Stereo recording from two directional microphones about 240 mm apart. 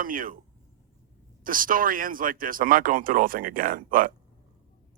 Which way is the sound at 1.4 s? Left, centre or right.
Right.